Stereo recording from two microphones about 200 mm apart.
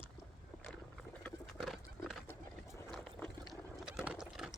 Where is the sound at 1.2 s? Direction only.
Centre (ahead or behind).